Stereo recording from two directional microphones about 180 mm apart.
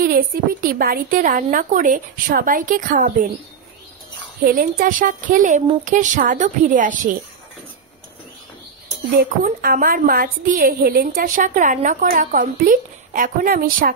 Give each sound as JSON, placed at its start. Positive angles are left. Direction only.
{"t": 0.0, "sound": "a woman's voice", "side_deg": -50}
{"t": 4.6, "sound": "a woman's voice", "side_deg": -50}
{"t": 9.1, "sound": "a woman's voice", "side_deg": -55}